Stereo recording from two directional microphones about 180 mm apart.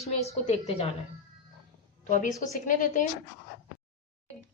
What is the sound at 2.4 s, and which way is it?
Speech, 45° left (ahead or behind).